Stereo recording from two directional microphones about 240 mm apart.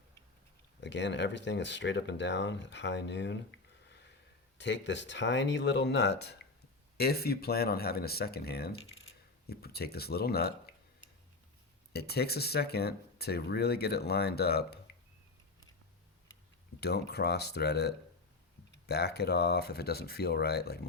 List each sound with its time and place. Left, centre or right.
0.8 s speech: left
3.8 s a sound: left
4.5 s speech: left
16.8 s speech: left